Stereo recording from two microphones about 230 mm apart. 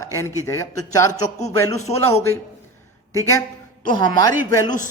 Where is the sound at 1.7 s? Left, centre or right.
Left.